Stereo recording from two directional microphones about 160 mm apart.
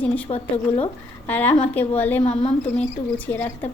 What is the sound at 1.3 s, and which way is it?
Speech, 10° left (ahead or behind).